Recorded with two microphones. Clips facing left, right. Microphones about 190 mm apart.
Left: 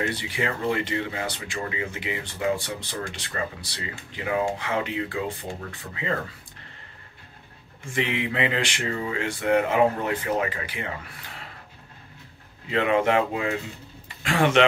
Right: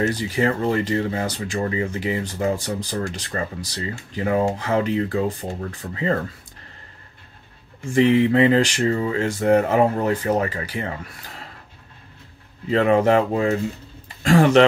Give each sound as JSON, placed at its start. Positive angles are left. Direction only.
{"t": 0.0, "sound": "speech", "side_deg": -40}
{"t": 7.9, "sound": "speech", "side_deg": -40}
{"t": 12.6, "sound": "speech", "side_deg": -40}
{"t": 14.0, "sound": "a sound", "side_deg": -40}